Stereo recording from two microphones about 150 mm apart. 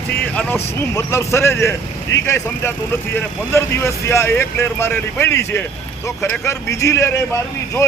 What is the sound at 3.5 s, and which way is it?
Speech, 20° left (ahead or behind).